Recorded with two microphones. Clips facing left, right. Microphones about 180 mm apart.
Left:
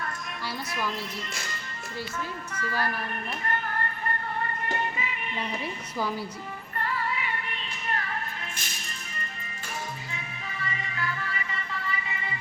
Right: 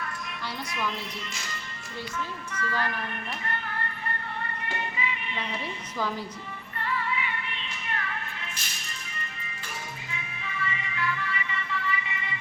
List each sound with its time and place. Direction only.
2.5 s speech: 35° left (ahead or behind)
3.4 s music: 45° left (ahead or behind)
6.7 s music: 40° left (ahead or behind)
10.1 s music: 40° left (ahead or behind)